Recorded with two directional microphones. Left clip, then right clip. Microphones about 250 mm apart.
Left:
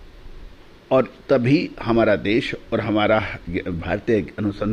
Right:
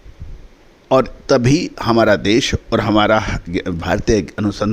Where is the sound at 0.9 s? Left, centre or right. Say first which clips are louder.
Right 4 dB; right.